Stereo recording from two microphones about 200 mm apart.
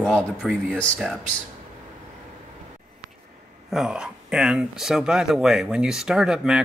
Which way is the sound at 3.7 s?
Centre (ahead or behind).